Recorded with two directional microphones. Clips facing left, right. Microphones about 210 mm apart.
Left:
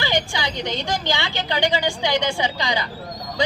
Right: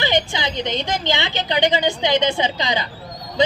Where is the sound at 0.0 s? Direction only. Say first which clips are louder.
Right 3 dB; 20° right (ahead or behind).